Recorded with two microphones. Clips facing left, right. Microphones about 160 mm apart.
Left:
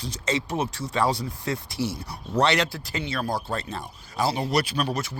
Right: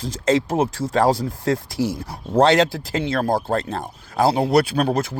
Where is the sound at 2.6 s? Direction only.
90° right.